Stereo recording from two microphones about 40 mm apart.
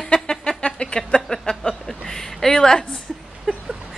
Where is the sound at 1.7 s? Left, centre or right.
Centre.